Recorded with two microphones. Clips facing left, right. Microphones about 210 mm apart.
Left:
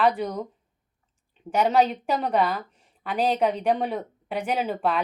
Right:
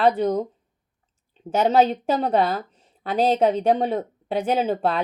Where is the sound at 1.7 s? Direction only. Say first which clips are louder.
Right 4 dB; 30° right (ahead or behind).